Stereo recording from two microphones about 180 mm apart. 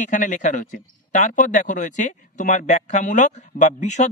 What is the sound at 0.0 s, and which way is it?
Speech, 45° left (ahead or behind).